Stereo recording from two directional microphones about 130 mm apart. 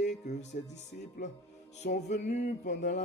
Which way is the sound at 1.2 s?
90° left.